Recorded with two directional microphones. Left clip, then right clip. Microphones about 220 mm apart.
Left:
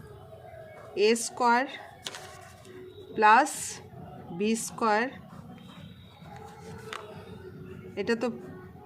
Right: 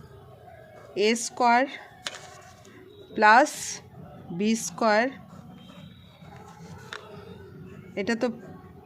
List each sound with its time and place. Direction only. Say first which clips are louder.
0.9 s a woman's voice: right 1 dB; 35° right (ahead or behind)
3.2 s a woman's voice: right 3 dB; 35° right (ahead or behind)
7.9 s a woman's voice: right 2 dB; 30° right (ahead or behind)